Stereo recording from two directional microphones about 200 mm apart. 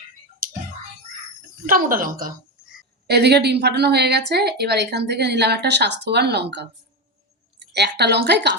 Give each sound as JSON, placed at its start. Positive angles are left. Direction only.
{"t": 1.6, "sound": "speech", "side_deg": -45}
{"t": 3.1, "sound": "a woman's voice", "side_deg": -55}
{"t": 7.7, "sound": "a woman's voice", "side_deg": -55}